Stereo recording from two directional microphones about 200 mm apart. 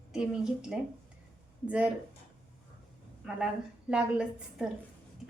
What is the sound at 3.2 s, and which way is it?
A woman's voice, 5° right (ahead or behind).